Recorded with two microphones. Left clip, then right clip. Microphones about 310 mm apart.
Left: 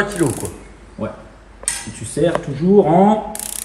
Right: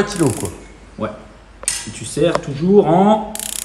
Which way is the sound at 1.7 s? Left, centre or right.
Centre.